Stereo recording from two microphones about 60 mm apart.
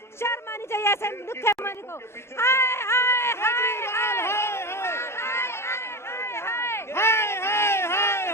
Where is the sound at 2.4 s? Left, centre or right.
Left.